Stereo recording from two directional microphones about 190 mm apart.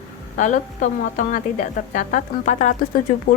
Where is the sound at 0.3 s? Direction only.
40° left (ahead or behind).